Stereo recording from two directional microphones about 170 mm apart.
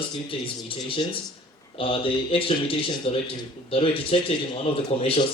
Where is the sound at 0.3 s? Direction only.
30° left (ahead or behind).